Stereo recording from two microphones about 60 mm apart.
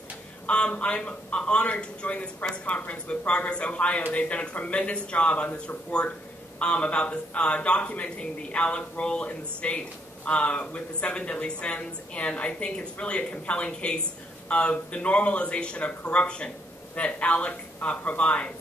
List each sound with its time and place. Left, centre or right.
0.5 s a man's voice: centre